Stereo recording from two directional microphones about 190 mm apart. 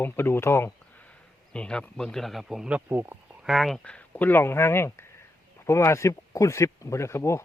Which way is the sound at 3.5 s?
Centre (ahead or behind).